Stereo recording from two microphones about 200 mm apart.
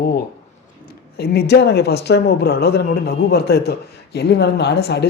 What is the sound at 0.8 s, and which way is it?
Speech, 50° left (ahead or behind).